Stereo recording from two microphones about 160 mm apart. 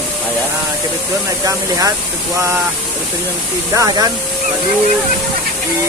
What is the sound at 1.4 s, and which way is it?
Speech, 20° right (ahead or behind).